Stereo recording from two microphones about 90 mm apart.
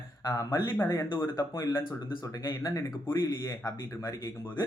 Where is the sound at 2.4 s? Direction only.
45° left (ahead or behind).